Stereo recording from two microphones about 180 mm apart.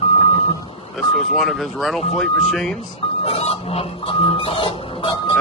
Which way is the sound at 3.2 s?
35° left (ahead or behind).